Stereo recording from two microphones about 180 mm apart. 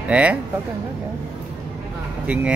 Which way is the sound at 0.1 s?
5° right (ahead or behind).